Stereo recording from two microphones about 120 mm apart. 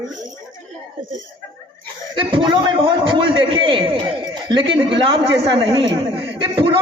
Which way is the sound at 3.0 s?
45° right (ahead or behind).